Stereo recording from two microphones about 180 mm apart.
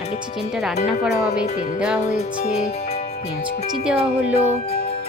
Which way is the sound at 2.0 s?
35° left (ahead or behind).